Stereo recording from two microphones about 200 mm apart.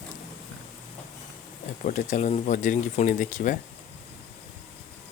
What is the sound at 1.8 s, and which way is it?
Speech, 40° left (ahead or behind).